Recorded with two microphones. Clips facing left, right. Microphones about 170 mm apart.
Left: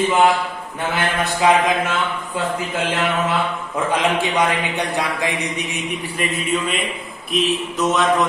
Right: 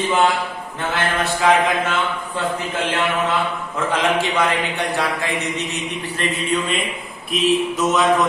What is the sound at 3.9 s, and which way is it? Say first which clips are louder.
A man's voice: even; 15° left (ahead or behind).